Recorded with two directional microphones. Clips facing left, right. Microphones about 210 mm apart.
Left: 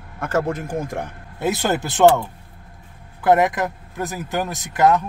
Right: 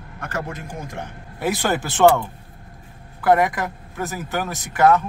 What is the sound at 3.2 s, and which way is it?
Speech, 20° left (ahead or behind).